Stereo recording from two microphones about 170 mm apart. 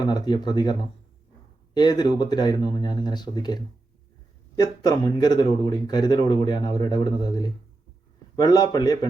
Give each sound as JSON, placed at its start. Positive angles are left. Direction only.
{"t": 0.0, "sound": "speech", "side_deg": 25}